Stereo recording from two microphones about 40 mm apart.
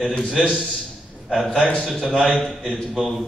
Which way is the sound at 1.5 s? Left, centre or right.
Left.